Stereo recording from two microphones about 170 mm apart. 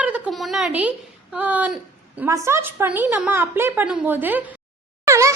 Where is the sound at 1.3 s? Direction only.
10° right (ahead or behind).